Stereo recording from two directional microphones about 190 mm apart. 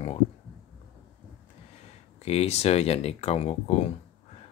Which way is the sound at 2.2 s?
35° left (ahead or behind).